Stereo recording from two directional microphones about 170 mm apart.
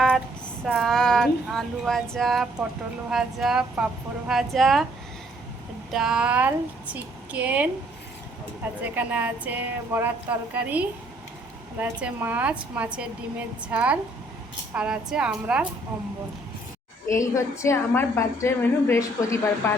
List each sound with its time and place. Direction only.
0.6 s speech: centre (ahead or behind)
5.9 s speech: 5° right (ahead or behind)
8.8 s speech: 10° right (ahead or behind)
17.1 s a woman's voice: 15° left (ahead or behind)